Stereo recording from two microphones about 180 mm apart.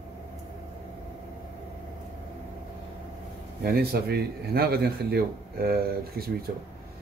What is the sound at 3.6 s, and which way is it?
A man's voice, 60° right (ahead or behind).